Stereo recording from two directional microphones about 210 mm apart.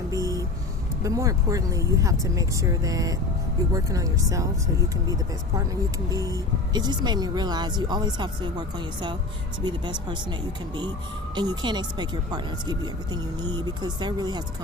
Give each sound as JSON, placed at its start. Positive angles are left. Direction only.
{"t": 0.1, "sound": "a sound", "side_deg": -15}
{"t": 1.0, "sound": "speech", "side_deg": -15}
{"t": 11.3, "sound": "speech", "side_deg": -20}